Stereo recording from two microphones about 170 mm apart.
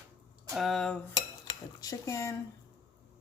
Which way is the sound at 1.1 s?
20° left (ahead or behind).